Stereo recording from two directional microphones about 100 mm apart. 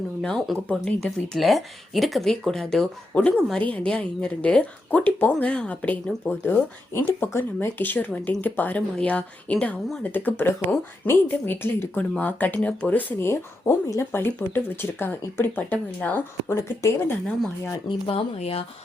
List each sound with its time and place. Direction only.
0.2 s speech: 5° left (ahead or behind)
6.4 s speech: 25° left (ahead or behind)
17.8 s speech: 60° left (ahead or behind); by 18.6 s 80° left